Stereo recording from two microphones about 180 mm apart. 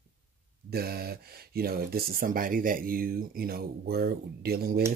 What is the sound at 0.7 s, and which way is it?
Speech, 60° right (ahead or behind).